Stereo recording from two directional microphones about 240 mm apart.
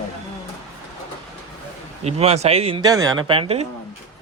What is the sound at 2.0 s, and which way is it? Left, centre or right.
Speech, right.